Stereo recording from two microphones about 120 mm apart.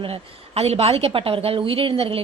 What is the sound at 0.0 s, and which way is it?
A woman's voice, 55° right (ahead or behind).